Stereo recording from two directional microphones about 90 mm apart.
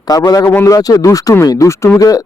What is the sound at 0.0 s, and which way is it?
A man's voice, 45° left (ahead or behind).